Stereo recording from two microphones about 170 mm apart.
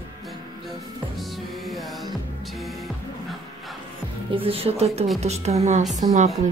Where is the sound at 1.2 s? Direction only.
Centre (ahead or behind).